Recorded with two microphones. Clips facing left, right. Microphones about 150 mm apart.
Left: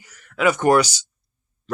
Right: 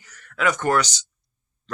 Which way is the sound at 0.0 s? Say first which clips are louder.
Left 4 dB; 10° left (ahead or behind).